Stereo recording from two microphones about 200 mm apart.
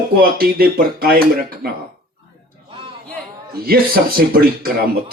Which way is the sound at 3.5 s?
50° right (ahead or behind).